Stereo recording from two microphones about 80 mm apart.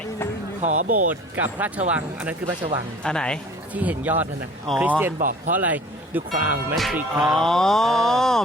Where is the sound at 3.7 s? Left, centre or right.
Centre.